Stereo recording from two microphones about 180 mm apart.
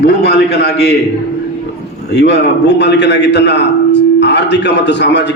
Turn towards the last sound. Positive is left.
turn(degrees=75)  # may be behind; listen again after turning